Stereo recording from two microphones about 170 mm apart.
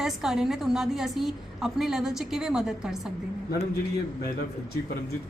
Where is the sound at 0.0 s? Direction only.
Centre (ahead or behind).